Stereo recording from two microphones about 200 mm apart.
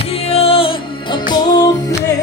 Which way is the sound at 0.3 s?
30° left (ahead or behind).